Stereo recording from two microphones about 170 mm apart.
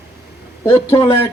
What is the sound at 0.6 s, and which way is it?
Speech, 30° left (ahead or behind).